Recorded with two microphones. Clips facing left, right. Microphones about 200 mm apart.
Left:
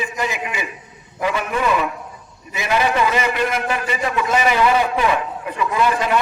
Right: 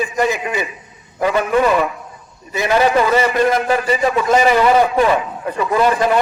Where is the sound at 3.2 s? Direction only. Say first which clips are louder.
Right 5 dB; 35° right (ahead or behind).